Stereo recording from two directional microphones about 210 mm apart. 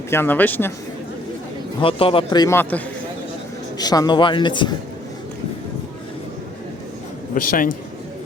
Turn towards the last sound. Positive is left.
turn(degrees=40)  # may be behind; listen again after turning